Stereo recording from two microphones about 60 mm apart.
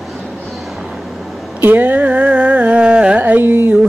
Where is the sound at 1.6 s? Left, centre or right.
Right.